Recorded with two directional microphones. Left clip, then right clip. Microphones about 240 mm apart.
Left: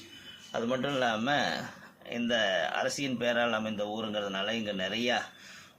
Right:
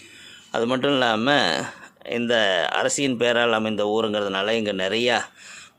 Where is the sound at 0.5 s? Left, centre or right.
Right.